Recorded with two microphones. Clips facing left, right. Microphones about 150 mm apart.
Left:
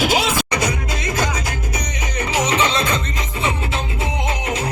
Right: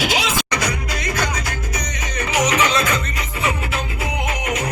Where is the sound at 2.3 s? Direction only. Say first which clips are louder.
Right 1 dB; 30° left (ahead or behind).